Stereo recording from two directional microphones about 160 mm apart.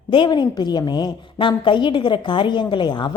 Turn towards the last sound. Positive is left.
turn(degrees=30)  # may be behind; listen again after turning